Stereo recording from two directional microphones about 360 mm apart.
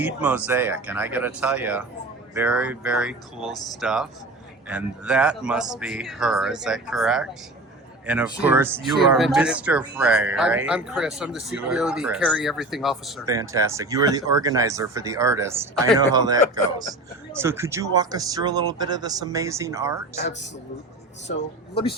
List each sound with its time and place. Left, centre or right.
0.0 s speech: centre